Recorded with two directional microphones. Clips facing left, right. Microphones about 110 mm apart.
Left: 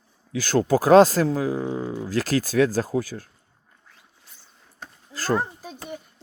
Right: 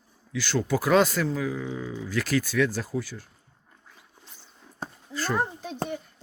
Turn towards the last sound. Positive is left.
turn(degrees=5)  # may be behind; listen again after turning